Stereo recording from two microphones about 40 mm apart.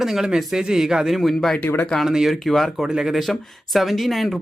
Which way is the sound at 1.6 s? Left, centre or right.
Left.